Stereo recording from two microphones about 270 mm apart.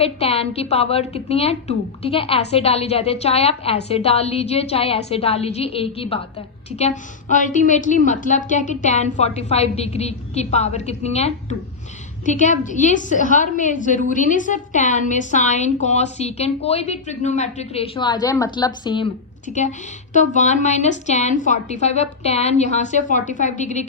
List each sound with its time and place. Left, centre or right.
0.0 s a woman's voice: left
20.1 s a woman's voice: left